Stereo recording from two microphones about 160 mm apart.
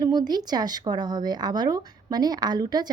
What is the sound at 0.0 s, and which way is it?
Speech, 25° right (ahead or behind).